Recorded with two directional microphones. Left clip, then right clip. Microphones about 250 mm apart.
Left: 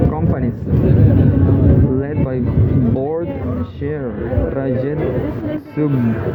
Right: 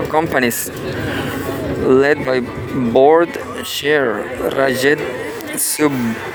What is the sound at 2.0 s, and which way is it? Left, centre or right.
Speech, right.